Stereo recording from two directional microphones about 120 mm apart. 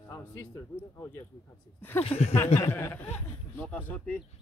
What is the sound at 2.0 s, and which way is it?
Speech, 55° left (ahead or behind).